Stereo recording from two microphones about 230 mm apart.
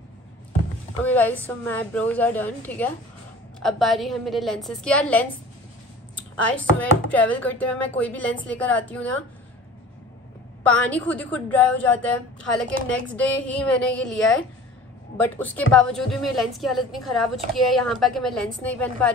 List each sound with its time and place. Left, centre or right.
1.0 s a woman's voice: centre
10.6 s a woman's voice: centre